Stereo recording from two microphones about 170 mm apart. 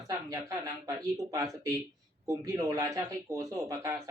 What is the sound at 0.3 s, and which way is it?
Speech, 20° right (ahead or behind).